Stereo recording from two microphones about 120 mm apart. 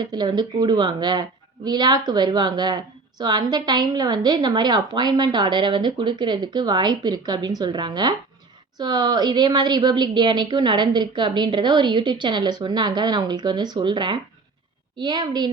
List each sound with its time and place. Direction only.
0.0 s speech: 35° right (ahead or behind)